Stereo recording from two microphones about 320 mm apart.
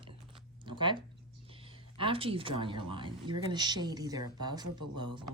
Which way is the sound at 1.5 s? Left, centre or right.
Centre.